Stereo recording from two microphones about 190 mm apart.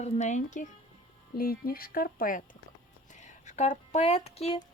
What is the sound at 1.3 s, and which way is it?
Speech, 50° left (ahead or behind).